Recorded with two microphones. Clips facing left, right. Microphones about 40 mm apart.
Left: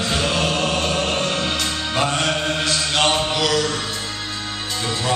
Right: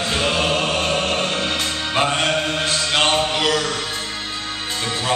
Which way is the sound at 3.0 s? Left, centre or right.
Centre.